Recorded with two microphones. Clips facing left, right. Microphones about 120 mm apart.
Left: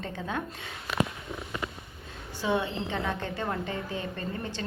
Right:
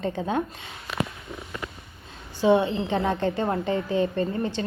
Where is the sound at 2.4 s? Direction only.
25° right (ahead or behind).